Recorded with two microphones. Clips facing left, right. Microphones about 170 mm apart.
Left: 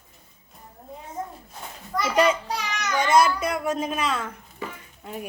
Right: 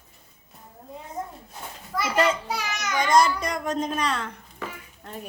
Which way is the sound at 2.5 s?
10° right (ahead or behind).